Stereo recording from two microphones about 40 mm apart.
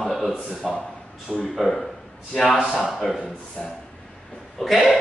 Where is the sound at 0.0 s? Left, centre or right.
Centre.